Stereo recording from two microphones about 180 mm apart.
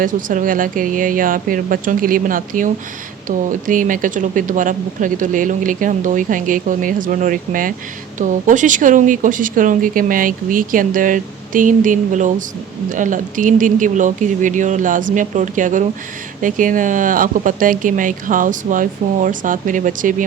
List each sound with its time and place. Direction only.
0.0 s speech: 50° right (ahead or behind)